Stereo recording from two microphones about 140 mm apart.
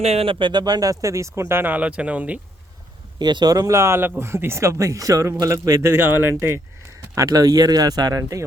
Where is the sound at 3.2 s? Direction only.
30° right (ahead or behind).